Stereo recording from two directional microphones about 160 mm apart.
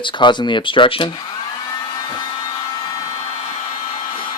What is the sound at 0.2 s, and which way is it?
Speech, 30° left (ahead or behind).